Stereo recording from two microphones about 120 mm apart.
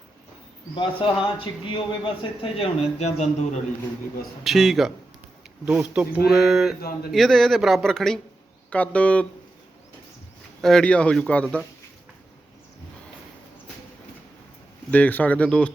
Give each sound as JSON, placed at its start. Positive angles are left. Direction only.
{"t": 0.8, "sound": "speech", "side_deg": 45}
{"t": 2.4, "sound": "speech", "side_deg": 55}
{"t": 4.4, "sound": "a man's voice", "side_deg": 0}
{"t": 5.6, "sound": "speech", "side_deg": -10}
{"t": 6.2, "sound": "a man's voice", "side_deg": 0}
{"t": 10.6, "sound": "speech", "side_deg": 5}
{"t": 14.8, "sound": "speech", "side_deg": 10}